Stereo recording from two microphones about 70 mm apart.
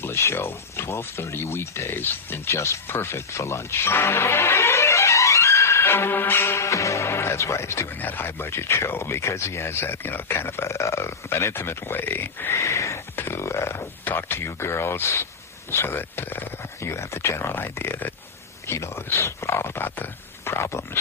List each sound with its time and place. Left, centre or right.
0.0 s speech: left
8.0 s speech: left
12.5 s a sound: left
13.1 s speech: left
14.0 s speech: left